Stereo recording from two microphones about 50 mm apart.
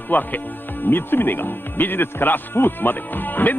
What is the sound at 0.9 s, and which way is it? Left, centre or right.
Speech, left.